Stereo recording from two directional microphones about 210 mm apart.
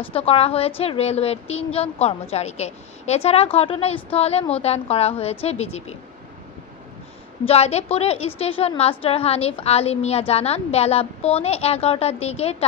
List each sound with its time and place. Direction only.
0.1 s a woman's voice: 30° left (ahead or behind)
7.4 s a woman's voice: 30° left (ahead or behind)